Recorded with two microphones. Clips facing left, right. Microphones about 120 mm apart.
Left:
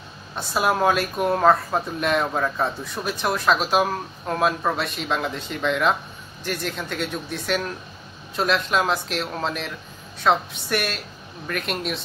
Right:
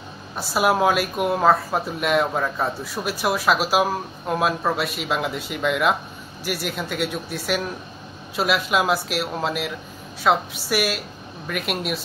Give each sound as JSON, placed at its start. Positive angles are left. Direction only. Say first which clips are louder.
{"t": 0.4, "sound": "speech", "louder": "right 2 dB", "side_deg": -5}